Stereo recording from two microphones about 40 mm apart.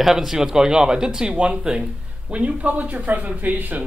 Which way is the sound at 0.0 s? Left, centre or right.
Centre.